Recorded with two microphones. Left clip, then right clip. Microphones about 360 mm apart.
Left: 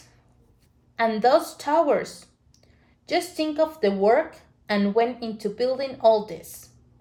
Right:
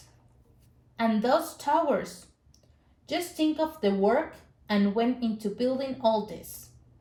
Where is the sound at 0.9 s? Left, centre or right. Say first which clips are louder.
Left 6 dB; centre.